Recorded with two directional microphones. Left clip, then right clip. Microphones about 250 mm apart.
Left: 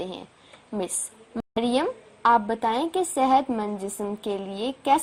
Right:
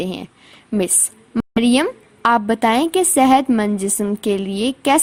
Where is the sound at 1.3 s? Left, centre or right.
Right.